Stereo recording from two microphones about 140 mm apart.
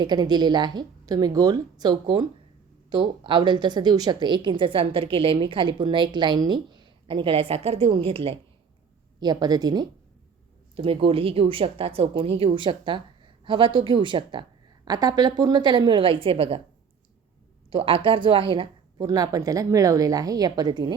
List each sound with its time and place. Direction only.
0.0 s a woman's voice: 30° right (ahead or behind)
9.2 s a woman's voice: 30° right (ahead or behind)
10.8 s a woman's voice: 40° right (ahead or behind)
17.7 s a woman's voice: 40° right (ahead or behind)